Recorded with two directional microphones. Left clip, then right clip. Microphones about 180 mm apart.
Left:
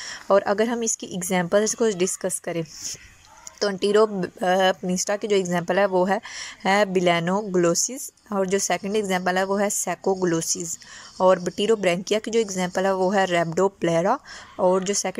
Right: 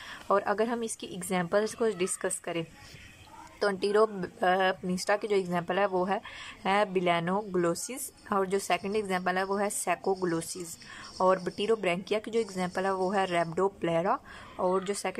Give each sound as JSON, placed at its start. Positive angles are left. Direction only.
{"t": 0.0, "sound": "speech", "side_deg": 15}